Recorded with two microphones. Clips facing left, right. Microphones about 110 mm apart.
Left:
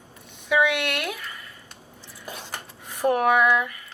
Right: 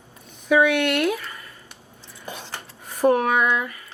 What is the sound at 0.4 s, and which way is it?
Speech, 40° right (ahead or behind).